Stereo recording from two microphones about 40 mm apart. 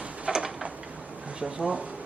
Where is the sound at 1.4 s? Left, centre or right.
Right.